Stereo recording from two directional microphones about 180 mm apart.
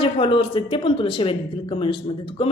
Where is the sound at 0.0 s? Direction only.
30° left (ahead or behind).